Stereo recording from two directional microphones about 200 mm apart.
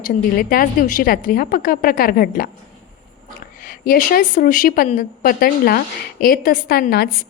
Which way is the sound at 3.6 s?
45° left (ahead or behind).